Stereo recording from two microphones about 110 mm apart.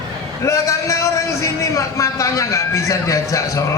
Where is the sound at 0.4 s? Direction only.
25° left (ahead or behind).